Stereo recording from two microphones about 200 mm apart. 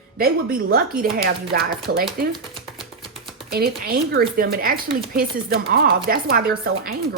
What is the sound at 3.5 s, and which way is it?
Speech, 50° right (ahead or behind).